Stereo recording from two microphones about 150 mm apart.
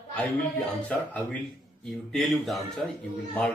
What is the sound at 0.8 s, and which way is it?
A man's voice, 10° left (ahead or behind).